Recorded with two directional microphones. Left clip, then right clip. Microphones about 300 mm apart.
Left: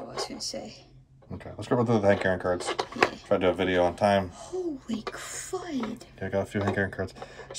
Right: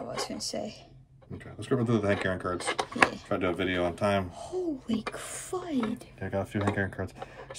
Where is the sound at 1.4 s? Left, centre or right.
Centre.